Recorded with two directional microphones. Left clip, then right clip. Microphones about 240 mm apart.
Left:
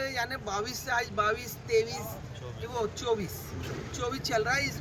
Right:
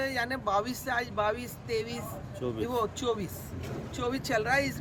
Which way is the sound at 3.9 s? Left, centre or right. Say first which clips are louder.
Even; right.